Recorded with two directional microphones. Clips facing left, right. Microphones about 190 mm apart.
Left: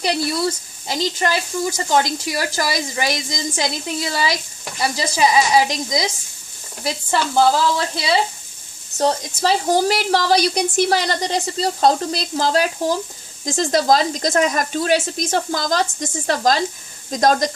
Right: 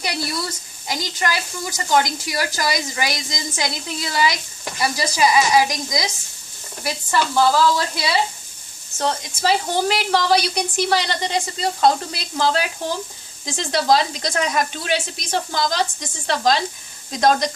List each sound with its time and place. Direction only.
0.0 s speech: 30° left (ahead or behind)
9.0 s a woman's voice: 35° left (ahead or behind)